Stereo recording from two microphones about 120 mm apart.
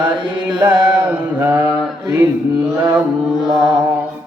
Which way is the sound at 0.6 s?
15° right (ahead or behind).